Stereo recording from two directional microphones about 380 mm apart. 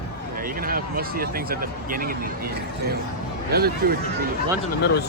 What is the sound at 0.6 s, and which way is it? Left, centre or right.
Speech, right.